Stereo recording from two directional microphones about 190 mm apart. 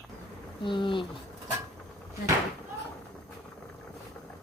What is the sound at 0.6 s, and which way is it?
Speech, 25° left (ahead or behind).